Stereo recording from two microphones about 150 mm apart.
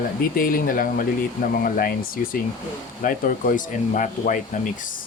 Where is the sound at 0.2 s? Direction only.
75° left (ahead or behind).